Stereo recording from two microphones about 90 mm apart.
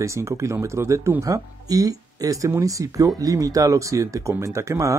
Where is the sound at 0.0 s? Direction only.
35° right (ahead or behind).